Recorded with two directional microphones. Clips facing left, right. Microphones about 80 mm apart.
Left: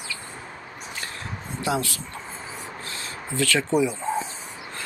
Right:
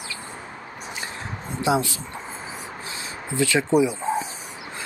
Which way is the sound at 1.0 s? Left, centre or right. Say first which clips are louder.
Right 2 dB; centre.